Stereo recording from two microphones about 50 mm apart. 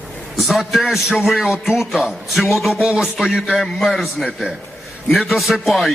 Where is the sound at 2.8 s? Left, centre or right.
Centre.